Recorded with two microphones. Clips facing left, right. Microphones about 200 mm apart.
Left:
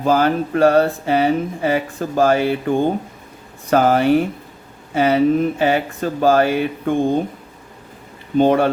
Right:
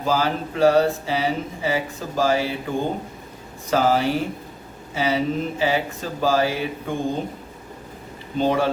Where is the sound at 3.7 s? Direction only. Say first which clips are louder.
Left 6 dB; 55° left (ahead or behind).